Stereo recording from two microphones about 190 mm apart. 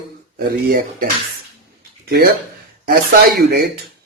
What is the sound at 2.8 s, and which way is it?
Speech, 55° right (ahead or behind).